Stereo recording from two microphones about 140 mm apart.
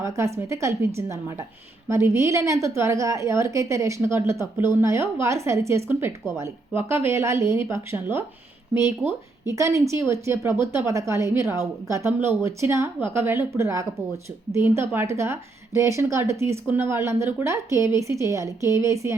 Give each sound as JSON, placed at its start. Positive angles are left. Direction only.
{"t": 0.0, "sound": "a woman's voice", "side_deg": -20}